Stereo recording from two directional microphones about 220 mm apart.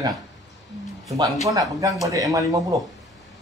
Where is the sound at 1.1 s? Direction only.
15° right (ahead or behind).